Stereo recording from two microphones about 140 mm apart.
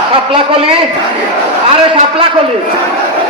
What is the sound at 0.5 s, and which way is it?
Speech, 40° right (ahead or behind).